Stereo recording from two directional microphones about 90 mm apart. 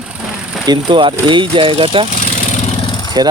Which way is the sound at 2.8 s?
55° left (ahead or behind).